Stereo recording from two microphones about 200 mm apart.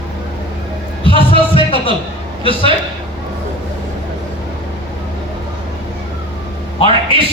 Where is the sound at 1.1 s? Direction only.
25° left (ahead or behind).